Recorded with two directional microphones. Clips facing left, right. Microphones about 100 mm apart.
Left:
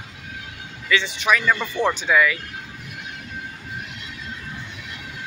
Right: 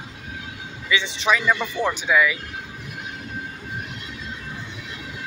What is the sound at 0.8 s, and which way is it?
Speech, 20° right (ahead or behind).